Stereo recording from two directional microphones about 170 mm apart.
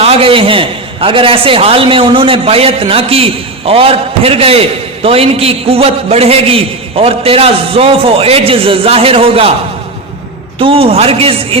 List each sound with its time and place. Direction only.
0.0 s a man's voice: 35° right (ahead or behind)
10.6 s a man's voice: 35° right (ahead or behind)